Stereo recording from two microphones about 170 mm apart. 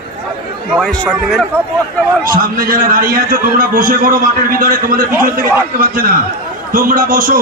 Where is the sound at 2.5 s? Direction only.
55° right (ahead or behind).